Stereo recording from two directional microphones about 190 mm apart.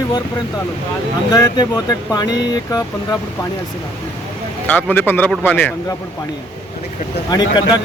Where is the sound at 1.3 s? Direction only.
20° left (ahead or behind).